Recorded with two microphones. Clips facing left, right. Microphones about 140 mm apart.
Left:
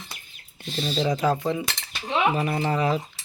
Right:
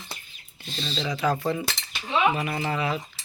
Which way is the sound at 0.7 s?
5° left (ahead or behind).